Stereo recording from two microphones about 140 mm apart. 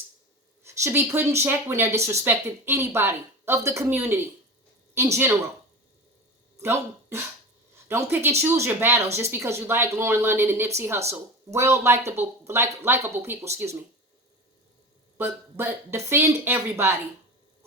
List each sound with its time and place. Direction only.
0.6 s speech: 20° right (ahead or behind)
6.6 s speech: 20° right (ahead or behind)
15.2 s speech: 15° right (ahead or behind)